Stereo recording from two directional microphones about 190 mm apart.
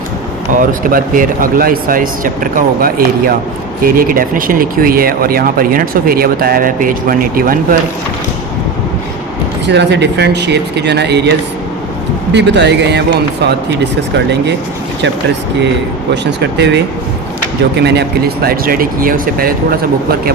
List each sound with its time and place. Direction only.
0.5 s speech: 45° right (ahead or behind)
9.6 s speech: 65° right (ahead or behind)
12.3 s speech: 65° right (ahead or behind)
16.4 s speech: 60° right (ahead or behind)
18.4 s speech: 50° right (ahead or behind)